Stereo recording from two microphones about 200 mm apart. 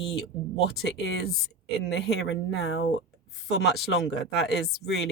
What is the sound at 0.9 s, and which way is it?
Speech, 60° left (ahead or behind).